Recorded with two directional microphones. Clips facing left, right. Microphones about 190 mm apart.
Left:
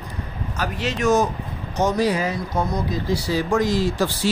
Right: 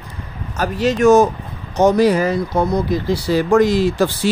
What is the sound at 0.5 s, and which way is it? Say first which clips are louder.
Speech: right 8 dB; 45° right (ahead or behind).